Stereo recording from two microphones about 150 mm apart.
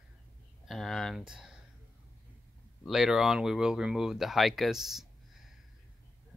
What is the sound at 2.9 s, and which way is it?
Speech, centre (ahead or behind).